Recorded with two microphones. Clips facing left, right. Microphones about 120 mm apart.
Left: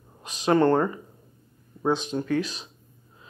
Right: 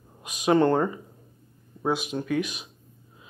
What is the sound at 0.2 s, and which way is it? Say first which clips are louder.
Speech: even; 15° right (ahead or behind).